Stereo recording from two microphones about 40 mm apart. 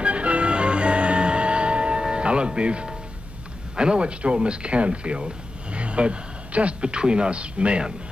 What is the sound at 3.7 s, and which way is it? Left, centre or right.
Speech, right.